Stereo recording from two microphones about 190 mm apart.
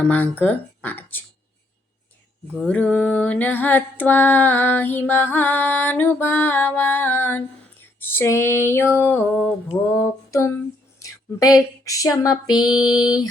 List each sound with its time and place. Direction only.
0.0 s female singing: 10° left (ahead or behind)
2.6 s female singing: 5° left (ahead or behind)
11.0 s a sound: 20° left (ahead or behind)
12.9 s mantra: 5° right (ahead or behind)